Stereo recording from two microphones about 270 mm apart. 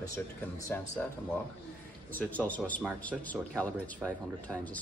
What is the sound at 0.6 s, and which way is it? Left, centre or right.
Speech, centre.